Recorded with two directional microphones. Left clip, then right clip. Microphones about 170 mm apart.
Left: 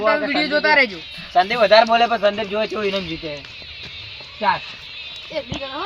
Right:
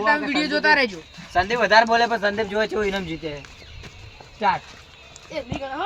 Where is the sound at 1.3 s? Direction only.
15° right (ahead or behind).